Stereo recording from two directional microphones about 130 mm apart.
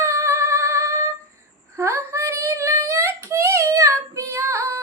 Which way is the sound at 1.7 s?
20° right (ahead or behind).